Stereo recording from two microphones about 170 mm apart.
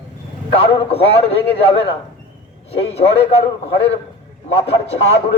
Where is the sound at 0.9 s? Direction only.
35° left (ahead or behind).